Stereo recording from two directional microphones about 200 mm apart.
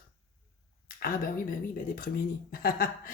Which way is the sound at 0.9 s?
45° left (ahead or behind).